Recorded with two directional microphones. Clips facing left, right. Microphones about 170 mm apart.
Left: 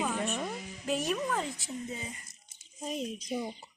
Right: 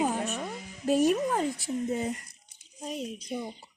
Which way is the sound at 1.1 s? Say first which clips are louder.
Right 6 dB; 40° right (ahead or behind).